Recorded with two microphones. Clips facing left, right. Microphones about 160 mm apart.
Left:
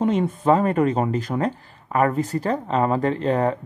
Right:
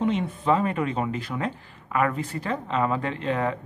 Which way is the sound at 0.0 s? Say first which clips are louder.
Left 5 dB; 45° left (ahead or behind).